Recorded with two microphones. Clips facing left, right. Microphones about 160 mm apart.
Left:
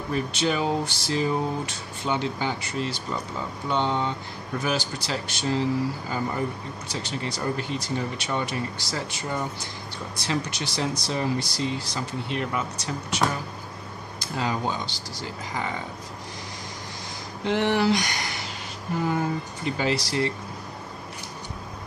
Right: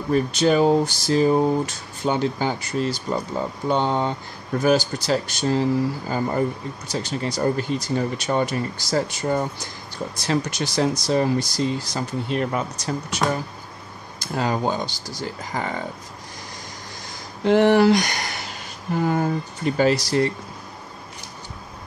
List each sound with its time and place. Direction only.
0.1 s speech: 40° right (ahead or behind)
14.2 s speech: 45° right (ahead or behind)
17.5 s speech: 45° right (ahead or behind)